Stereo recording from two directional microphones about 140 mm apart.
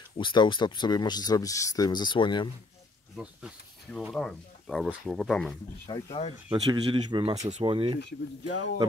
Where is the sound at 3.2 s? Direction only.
5° right (ahead or behind).